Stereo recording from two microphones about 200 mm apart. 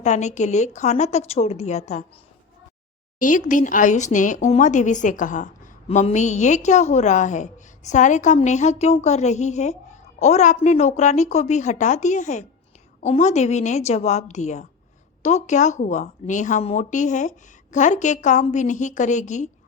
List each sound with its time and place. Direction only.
0.0 s speech: 35° left (ahead or behind)
3.2 s speech: 40° left (ahead or behind)